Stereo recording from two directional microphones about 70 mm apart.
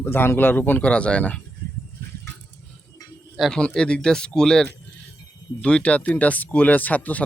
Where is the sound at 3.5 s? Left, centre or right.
Centre.